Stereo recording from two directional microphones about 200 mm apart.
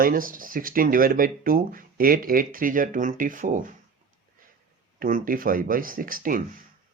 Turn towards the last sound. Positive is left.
turn(degrees=-45)  # may be behind; listen again after turning